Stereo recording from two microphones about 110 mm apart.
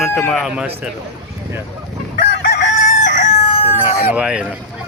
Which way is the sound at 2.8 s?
90° left.